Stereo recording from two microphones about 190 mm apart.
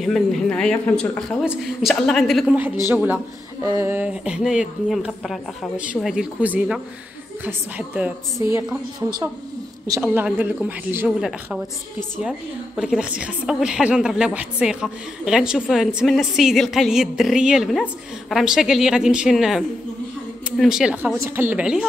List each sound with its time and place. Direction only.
0.0 s speech: centre (ahead or behind)
1.4 s a woman's voice: 5° right (ahead or behind)